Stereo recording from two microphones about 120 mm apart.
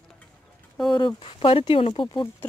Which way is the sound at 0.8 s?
40° left (ahead or behind).